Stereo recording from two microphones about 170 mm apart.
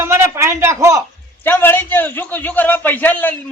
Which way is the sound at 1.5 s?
10° left (ahead or behind).